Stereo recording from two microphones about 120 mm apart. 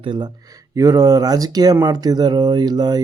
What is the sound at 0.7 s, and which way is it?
Speech, 30° right (ahead or behind).